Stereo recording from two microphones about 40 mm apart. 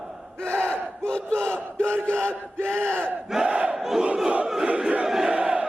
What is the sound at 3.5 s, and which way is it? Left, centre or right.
Crowd, right.